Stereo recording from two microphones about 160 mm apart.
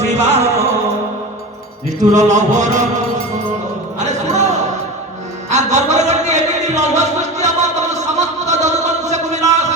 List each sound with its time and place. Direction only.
0.0 s music: 45° right (ahead or behind)
2.1 s music: 50° right (ahead or behind)
4.0 s music: 45° right (ahead or behind)
5.5 s a sound: 45° right (ahead or behind)